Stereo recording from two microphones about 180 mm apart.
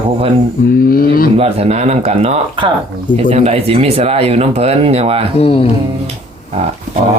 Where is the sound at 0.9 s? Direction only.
55° left (ahead or behind).